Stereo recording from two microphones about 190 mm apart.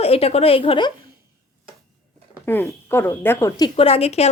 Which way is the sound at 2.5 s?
10° left (ahead or behind).